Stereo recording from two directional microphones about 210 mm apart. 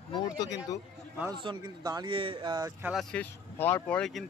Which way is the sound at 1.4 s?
20° right (ahead or behind).